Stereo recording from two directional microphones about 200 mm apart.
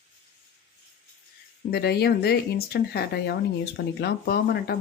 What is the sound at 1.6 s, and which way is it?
Speech, 50° left (ahead or behind).